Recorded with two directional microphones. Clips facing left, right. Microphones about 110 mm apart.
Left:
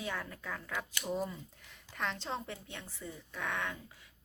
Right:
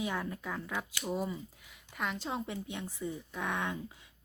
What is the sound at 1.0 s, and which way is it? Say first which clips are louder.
Speech: right 1 dB; 5° right (ahead or behind).